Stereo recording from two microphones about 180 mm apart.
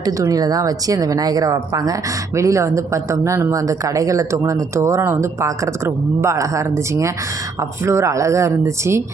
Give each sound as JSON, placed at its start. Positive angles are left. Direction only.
{"t": 0.0, "sound": "speech", "side_deg": -20}